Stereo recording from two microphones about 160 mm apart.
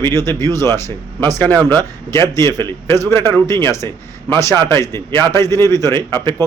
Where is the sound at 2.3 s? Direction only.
15° left (ahead or behind).